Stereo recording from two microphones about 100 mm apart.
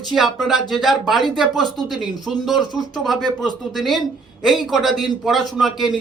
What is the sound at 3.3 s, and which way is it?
Speech, 45° left (ahead or behind).